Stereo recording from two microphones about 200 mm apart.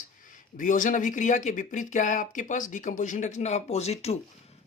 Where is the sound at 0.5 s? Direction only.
40° left (ahead or behind).